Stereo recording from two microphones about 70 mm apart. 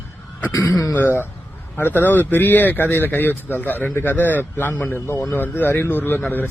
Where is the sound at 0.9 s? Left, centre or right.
Left.